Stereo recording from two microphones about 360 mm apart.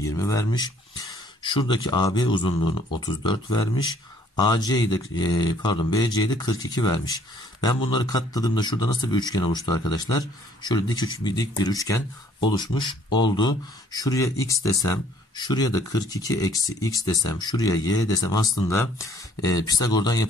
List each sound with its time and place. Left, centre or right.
0.0 s speech: centre